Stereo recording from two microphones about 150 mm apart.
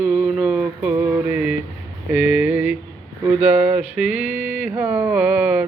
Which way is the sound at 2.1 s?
10° right (ahead or behind).